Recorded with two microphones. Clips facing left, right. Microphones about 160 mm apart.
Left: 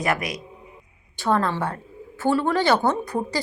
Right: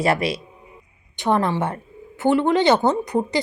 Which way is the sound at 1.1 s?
20° right (ahead or behind).